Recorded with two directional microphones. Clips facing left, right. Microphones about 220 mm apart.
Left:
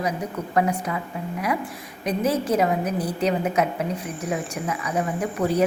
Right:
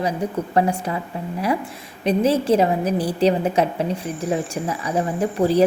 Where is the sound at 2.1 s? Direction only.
30° right (ahead or behind).